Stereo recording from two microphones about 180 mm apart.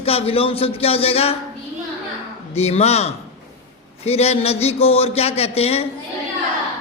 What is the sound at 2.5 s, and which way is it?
Speech, 35° left (ahead or behind).